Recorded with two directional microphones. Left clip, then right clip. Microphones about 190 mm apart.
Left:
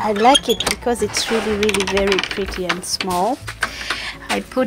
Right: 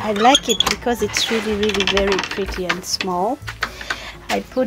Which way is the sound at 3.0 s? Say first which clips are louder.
Left 2 dB; 5° left (ahead or behind).